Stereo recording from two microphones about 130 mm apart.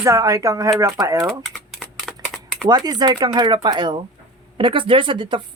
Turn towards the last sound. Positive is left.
turn(degrees=-40)  # may be behind; listen again after turning